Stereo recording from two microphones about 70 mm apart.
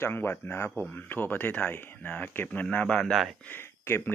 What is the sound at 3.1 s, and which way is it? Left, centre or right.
Speech, centre.